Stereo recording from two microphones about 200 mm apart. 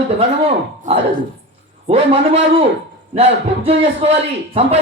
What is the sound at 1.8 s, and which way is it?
A man's voice, 30° right (ahead or behind).